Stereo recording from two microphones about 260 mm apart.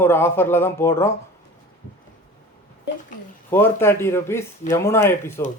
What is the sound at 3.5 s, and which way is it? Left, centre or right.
Speech, centre.